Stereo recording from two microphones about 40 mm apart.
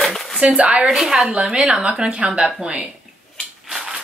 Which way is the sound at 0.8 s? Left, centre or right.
Centre.